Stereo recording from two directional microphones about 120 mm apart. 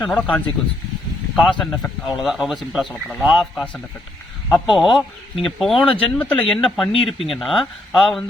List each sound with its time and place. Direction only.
0.0 s speech: 10° left (ahead or behind)
4.6 s speech: 5° right (ahead or behind)
6.9 s speech: 50° left (ahead or behind)
7.3 s speech: centre (ahead or behind)